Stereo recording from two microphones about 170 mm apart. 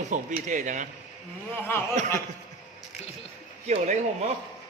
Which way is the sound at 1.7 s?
15° left (ahead or behind).